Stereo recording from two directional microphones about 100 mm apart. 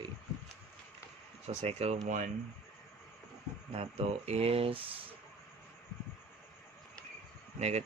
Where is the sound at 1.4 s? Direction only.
90° right.